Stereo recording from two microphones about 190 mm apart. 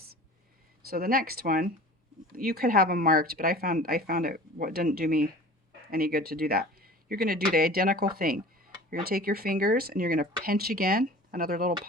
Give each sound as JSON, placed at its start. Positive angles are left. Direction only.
{"t": 0.9, "sound": "speech", "side_deg": -50}
{"t": 8.2, "sound": "a sound", "side_deg": -50}
{"t": 9.0, "sound": "speech", "side_deg": -50}